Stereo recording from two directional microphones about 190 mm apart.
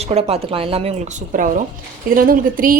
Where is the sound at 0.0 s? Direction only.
35° right (ahead or behind).